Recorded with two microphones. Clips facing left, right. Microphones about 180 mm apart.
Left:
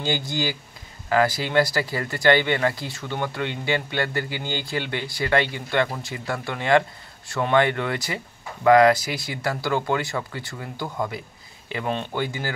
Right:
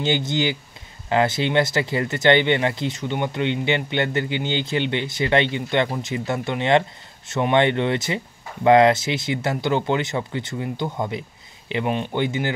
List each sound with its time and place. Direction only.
0.0 s speech: 20° right (ahead or behind)